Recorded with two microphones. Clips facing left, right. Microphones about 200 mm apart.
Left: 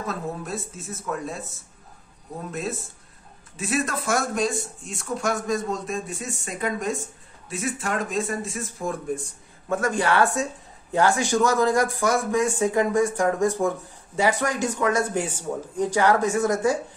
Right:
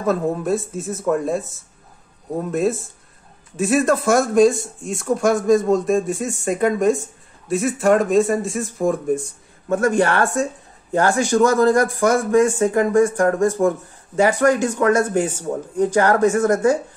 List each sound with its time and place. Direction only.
0.0 s speech: 50° right (ahead or behind)
3.5 s speech: 50° right (ahead or behind)
9.7 s speech: 50° right (ahead or behind)